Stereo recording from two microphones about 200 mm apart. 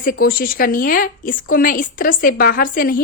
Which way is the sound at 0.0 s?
45° left (ahead or behind).